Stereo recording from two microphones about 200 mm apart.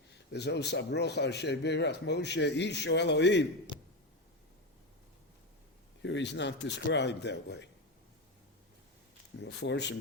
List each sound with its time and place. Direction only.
0.3 s a man's voice: 55° left (ahead or behind)
6.0 s a man's voice: 65° left (ahead or behind)
9.4 s a man's voice: 60° left (ahead or behind)